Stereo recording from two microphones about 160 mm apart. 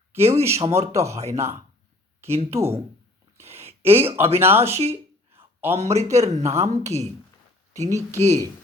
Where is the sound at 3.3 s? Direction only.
15° right (ahead or behind).